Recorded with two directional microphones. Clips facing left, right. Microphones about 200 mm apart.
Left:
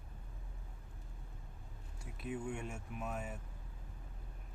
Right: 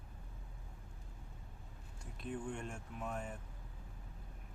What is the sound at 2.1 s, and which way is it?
Speech, 5° left (ahead or behind).